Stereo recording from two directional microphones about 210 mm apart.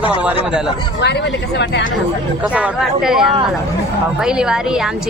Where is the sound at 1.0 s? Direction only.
55° left (ahead or behind).